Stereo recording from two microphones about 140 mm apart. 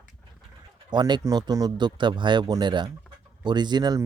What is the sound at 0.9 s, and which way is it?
Speech, 30° right (ahead or behind).